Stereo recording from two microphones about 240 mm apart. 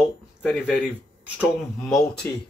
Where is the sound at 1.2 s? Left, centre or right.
Centre.